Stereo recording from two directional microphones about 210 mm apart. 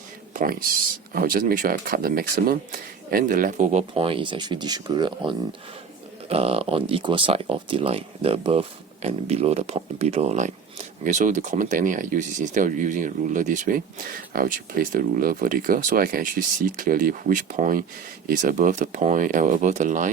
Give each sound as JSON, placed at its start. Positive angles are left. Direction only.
{"t": 0.3, "sound": "speech", "side_deg": -45}